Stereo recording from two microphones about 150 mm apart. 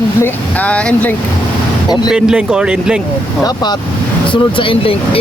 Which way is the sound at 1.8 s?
30° left (ahead or behind).